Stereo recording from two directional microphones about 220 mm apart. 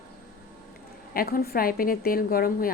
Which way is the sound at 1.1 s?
45° left (ahead or behind).